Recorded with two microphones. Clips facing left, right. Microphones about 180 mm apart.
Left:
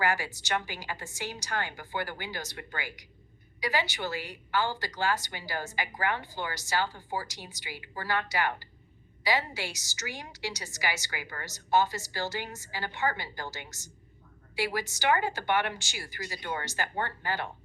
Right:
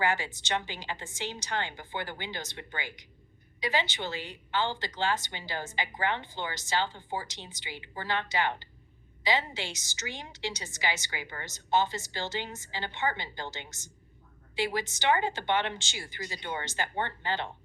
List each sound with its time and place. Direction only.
0.0 s a woman's voice: 20° right (ahead or behind)